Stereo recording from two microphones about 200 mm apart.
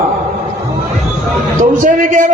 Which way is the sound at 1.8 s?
40° right (ahead or behind).